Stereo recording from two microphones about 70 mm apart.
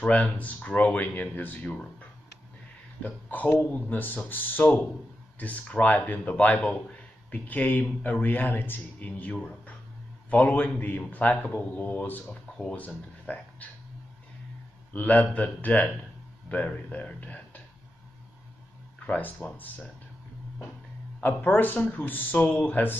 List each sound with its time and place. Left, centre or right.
0.0 s a man's voice: left
3.0 s a man's voice: left
14.9 s a man's voice: left
19.0 s a man's voice: left
21.2 s a man's voice: left